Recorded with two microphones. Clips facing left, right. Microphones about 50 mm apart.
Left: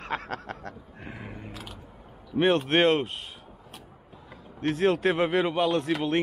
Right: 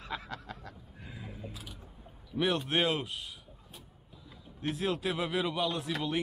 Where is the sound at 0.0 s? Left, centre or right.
Left.